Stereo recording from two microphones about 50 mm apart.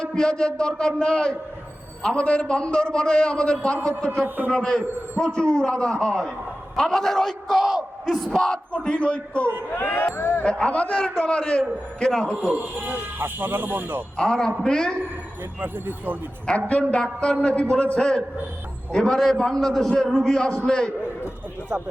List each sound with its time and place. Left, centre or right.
0.0 s a man's voice: centre
8.3 s a man's voice: centre
9.7 s speech: left
10.4 s a man's voice: left
12.5 s speech: right
14.2 s a man's voice: centre
15.6 s speech: right
16.6 s a man's voice: left
18.9 s a man's voice: centre
20.1 s a man's voice: centre
20.3 s a man's voice: centre